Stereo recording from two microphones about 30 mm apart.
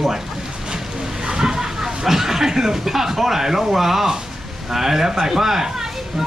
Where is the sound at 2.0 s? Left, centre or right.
Centre.